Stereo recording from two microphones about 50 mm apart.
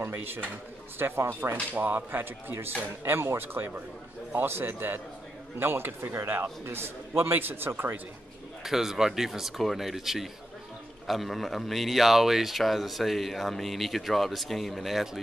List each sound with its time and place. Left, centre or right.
0.0 s a man's voice: right
1.8 s a man's voice: right
3.0 s a man's voice: right
8.6 s speech: centre